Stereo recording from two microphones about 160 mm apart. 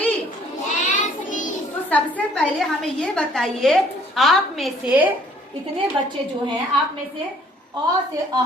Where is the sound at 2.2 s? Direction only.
5° left (ahead or behind).